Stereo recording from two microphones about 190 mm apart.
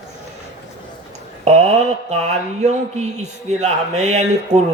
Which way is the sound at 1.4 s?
35° right (ahead or behind).